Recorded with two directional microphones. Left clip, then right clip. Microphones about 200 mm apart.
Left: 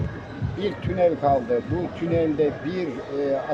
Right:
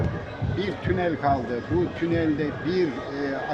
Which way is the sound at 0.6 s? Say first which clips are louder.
Left 5 dB; 15° left (ahead or behind).